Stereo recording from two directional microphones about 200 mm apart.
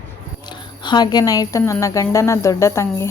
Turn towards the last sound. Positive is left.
turn(degrees=15)  # may be behind; listen again after turning